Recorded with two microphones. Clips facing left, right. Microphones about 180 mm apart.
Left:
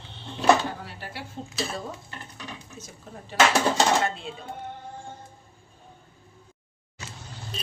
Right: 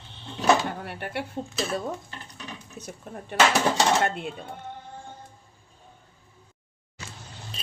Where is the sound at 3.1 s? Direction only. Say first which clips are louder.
Even; 60° right (ahead or behind).